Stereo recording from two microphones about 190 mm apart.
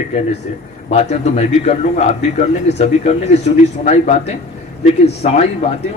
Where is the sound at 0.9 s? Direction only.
35° left (ahead or behind).